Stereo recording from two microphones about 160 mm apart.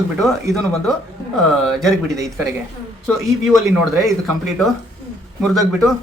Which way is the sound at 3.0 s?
Centre (ahead or behind).